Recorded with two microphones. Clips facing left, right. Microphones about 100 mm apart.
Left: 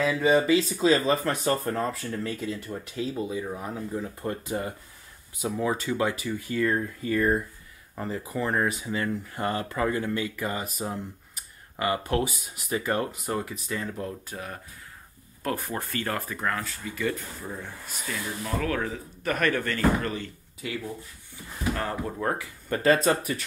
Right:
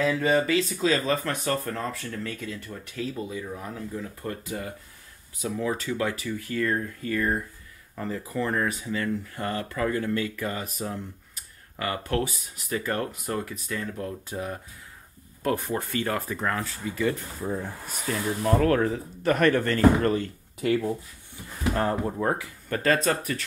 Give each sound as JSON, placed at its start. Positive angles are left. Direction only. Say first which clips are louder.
{"t": 0.0, "sound": "speech", "louder": "left 1 dB", "side_deg": 10}
{"t": 14.3, "sound": "speech", "louder": "right 4 dB", "side_deg": -15}
{"t": 16.4, "sound": "speech", "louder": "left 1 dB", "side_deg": -25}
{"t": 17.4, "sound": "speech", "louder": "right 7 dB", "side_deg": -15}
{"t": 18.0, "sound": "speech", "louder": "right 7 dB", "side_deg": -45}
{"t": 18.9, "sound": "speech", "louder": "right 5 dB", "side_deg": -30}
{"t": 22.0, "sound": "speech", "louder": "right 2 dB", "side_deg": -10}
{"t": 22.9, "sound": "speech", "louder": "left 1 dB", "side_deg": 10}